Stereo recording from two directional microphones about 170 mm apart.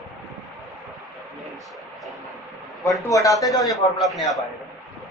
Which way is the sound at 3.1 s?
20° left (ahead or behind).